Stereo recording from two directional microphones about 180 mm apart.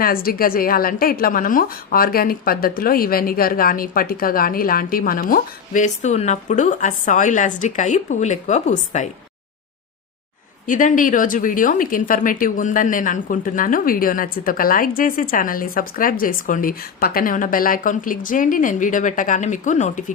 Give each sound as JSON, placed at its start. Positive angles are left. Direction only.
{"t": 0.0, "sound": "speech", "side_deg": 55}
{"t": 10.7, "sound": "speech", "side_deg": 45}